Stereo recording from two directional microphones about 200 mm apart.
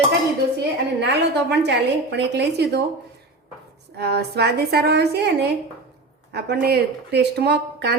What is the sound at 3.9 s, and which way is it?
Speech, 55° right (ahead or behind).